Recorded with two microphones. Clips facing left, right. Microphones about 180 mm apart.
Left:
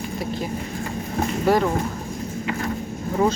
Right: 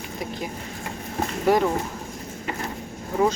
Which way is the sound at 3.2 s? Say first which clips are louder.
Left 1 dB; 5° right (ahead or behind).